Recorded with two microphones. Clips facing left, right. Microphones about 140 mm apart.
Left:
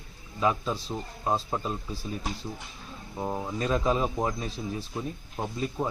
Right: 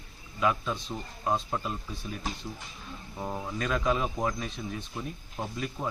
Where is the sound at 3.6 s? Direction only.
30° left (ahead or behind).